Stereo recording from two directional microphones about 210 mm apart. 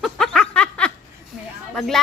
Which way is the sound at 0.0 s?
Centre (ahead or behind).